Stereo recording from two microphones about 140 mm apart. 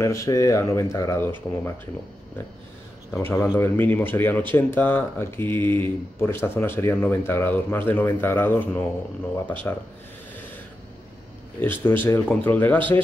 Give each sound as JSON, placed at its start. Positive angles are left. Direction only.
{"t": 0.0, "sound": "speech", "side_deg": 20}
{"t": 3.1, "sound": "speech", "side_deg": 15}
{"t": 11.6, "sound": "speech", "side_deg": 15}